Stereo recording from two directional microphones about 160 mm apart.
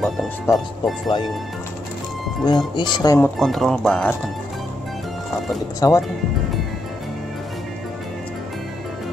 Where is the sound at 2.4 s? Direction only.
25° left (ahead or behind).